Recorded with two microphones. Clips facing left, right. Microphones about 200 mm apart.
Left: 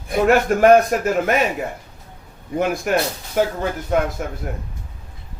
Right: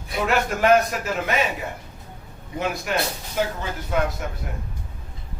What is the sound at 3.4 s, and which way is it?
Speech, 50° left (ahead or behind).